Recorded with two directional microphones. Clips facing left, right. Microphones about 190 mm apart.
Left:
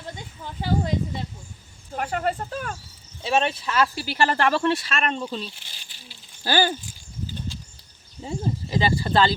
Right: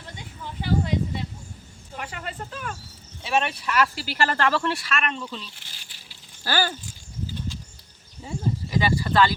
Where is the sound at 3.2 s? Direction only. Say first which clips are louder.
Left 2 dB; 30° left (ahead or behind).